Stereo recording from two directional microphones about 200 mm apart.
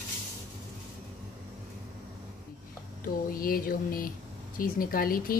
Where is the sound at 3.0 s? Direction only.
45° left (ahead or behind).